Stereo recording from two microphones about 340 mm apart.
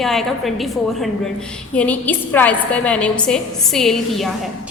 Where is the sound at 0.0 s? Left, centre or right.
Centre.